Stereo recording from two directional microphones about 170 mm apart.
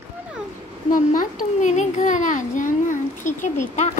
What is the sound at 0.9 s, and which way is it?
A child's voice, 50° left (ahead or behind).